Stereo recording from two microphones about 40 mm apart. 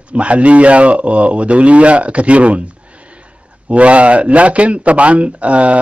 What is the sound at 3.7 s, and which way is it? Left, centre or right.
Speech, right.